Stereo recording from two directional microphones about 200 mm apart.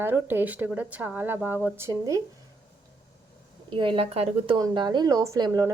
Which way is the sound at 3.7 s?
25° right (ahead or behind).